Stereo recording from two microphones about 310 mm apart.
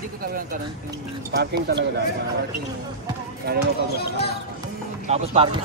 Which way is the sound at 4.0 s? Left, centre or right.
Left.